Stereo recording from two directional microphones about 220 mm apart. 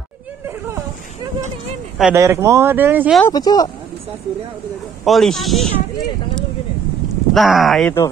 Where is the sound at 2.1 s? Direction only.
15° right (ahead or behind).